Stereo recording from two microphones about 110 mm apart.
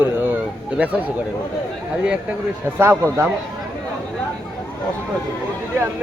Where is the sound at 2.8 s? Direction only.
25° right (ahead or behind).